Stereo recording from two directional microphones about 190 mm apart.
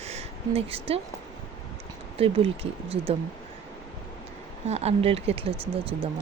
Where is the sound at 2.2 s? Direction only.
30° right (ahead or behind).